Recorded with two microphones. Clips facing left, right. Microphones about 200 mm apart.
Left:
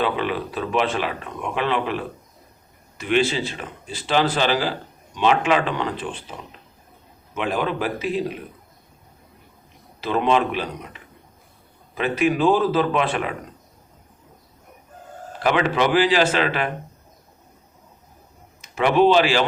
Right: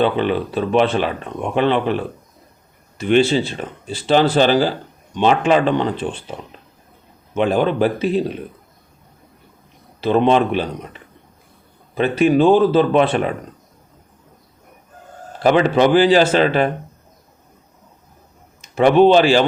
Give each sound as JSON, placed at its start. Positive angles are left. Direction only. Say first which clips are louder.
{"t": 0.0, "sound": "speech", "louder": "right 6 dB", "side_deg": -30}
{"t": 3.0, "sound": "speech", "louder": "right 6 dB", "side_deg": -30}
{"t": 7.3, "sound": "speech", "louder": "right 7 dB", "side_deg": -30}
{"t": 10.0, "sound": "speech", "louder": "right 5 dB", "side_deg": -30}
{"t": 11.9, "sound": "speech", "louder": "right 6 dB", "side_deg": -30}
{"t": 15.4, "sound": "speech", "louder": "right 6 dB", "side_deg": -35}
{"t": 18.7, "sound": "speech", "louder": "right 5 dB", "side_deg": -35}